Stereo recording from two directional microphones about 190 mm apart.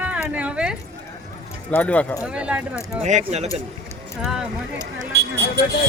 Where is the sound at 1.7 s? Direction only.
10° left (ahead or behind).